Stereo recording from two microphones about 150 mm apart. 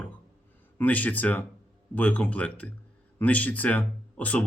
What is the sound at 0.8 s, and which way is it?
Speech, 10° left (ahead or behind).